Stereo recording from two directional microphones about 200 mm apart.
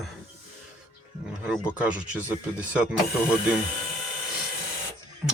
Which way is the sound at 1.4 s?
5° right (ahead or behind).